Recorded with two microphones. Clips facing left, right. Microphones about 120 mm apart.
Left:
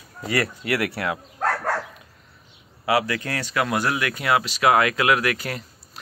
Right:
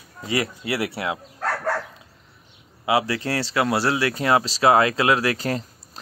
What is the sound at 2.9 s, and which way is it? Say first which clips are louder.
Speech: right 1 dB; 25° right (ahead or behind).